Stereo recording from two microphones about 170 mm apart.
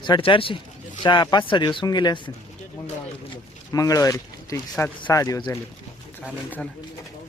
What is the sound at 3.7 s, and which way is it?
Speech, 20° left (ahead or behind).